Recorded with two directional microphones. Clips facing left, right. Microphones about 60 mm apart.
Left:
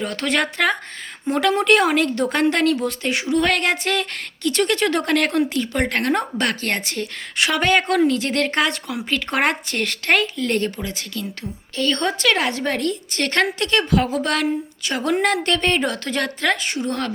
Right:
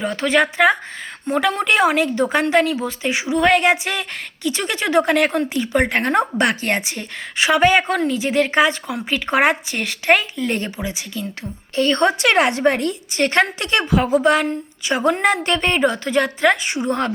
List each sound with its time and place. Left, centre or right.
0.0 s a woman's voice: centre
11.8 s a woman's voice: right